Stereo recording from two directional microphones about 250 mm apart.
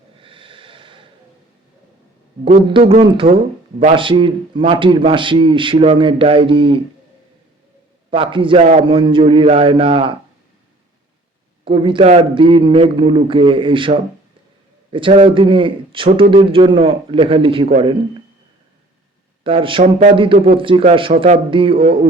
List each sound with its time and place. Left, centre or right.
0.2 s snort: right
2.6 s a man's voice: centre
8.1 s a man's voice: right
11.6 s a man's voice: right
19.5 s a man's voice: right